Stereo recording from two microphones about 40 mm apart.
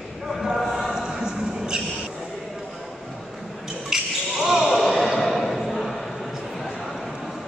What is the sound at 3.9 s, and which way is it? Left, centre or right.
Basketball bounce, centre.